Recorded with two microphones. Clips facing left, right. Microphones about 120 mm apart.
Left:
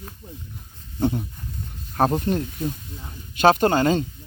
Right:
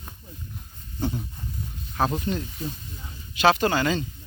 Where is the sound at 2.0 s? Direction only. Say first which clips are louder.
Left 5 dB; 50° left (ahead or behind).